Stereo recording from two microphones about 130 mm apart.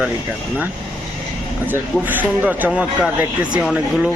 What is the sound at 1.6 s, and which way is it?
A man's voice, 15° right (ahead or behind).